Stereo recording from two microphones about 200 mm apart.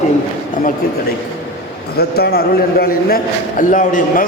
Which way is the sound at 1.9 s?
55° left (ahead or behind).